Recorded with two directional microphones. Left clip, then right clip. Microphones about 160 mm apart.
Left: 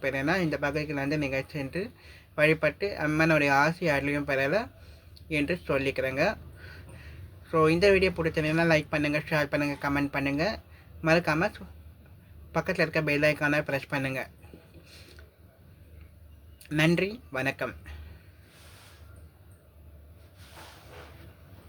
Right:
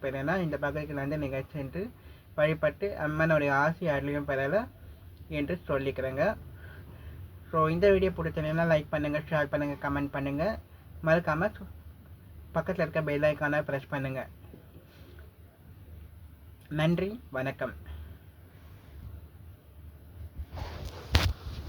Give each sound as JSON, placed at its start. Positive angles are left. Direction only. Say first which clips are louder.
{"t": 0.0, "sound": "speech", "louder": "left 3 dB", "side_deg": 20}
{"t": 7.5, "sound": "speech", "louder": "left 2 dB", "side_deg": 20}
{"t": 16.6, "sound": "speech", "louder": "left 4 dB", "side_deg": 20}